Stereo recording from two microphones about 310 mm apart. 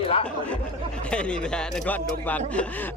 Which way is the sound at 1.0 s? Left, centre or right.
Centre.